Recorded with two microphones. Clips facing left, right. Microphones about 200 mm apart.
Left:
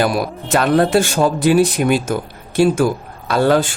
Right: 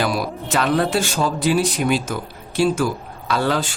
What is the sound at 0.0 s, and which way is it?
A man's voice, 50° left (ahead or behind).